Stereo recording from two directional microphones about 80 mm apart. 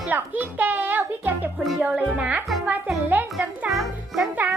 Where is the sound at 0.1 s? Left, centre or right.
Right.